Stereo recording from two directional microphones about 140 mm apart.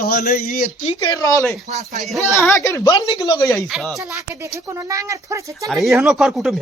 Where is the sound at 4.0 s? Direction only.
20° right (ahead or behind).